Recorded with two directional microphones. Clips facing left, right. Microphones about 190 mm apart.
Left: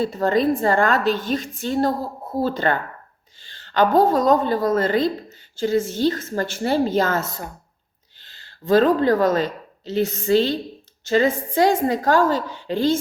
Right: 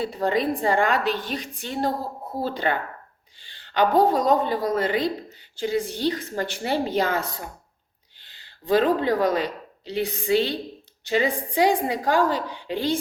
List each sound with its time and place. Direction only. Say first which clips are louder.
0.3 s a woman's voice: left 4 dB; 15° right (ahead or behind)
1.1 s a woman's voice: left 6 dB; 45° left (ahead or behind)
1.4 s a woman's voice: left 6 dB; 15° right (ahead or behind)
3.4 s a sound: left 3 dB; 15° right (ahead or behind)
4.0 s a woman's voice: left 3 dB; 15° right (ahead or behind)
8.2 s a sound: left 5 dB; 15° right (ahead or behind)
9.0 s a woman's voice: left 4 dB; 15° right (ahead or behind)